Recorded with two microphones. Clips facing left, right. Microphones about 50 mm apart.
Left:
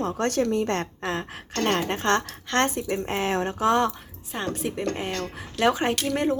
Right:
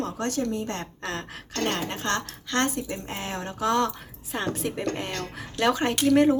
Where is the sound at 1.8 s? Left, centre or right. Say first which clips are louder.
Left 5 dB; left.